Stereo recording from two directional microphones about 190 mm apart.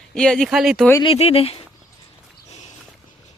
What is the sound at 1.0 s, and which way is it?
Speech, 30° left (ahead or behind).